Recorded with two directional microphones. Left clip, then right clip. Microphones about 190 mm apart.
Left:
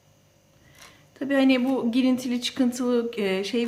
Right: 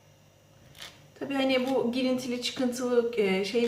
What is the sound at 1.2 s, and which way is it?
A woman's voice, 55° left (ahead or behind).